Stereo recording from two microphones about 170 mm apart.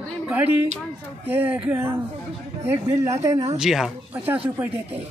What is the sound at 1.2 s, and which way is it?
A woman's voice, 10° right (ahead or behind).